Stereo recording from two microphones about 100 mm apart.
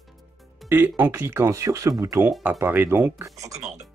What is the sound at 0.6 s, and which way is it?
Speech, 20° right (ahead or behind).